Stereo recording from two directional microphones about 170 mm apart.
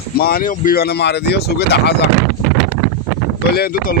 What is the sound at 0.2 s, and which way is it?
Speech, 60° left (ahead or behind).